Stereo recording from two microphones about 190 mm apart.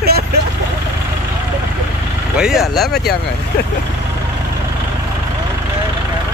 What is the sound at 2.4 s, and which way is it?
Speech, centre (ahead or behind).